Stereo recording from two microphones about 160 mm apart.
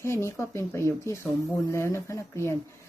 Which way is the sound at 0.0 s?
15° left (ahead or behind).